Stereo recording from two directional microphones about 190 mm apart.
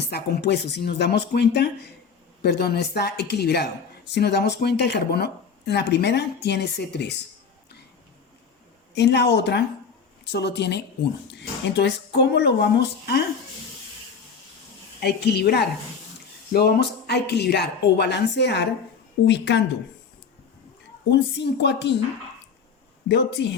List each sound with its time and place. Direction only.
0.0 s speech: 55° left (ahead or behind)
9.0 s speech: 65° left (ahead or behind)
15.0 s speech: 60° left (ahead or behind)
21.1 s speech: 65° left (ahead or behind)
23.0 s speech: 65° left (ahead or behind)